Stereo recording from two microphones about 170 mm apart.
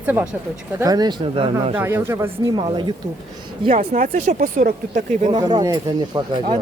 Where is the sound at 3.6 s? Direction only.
45° right (ahead or behind).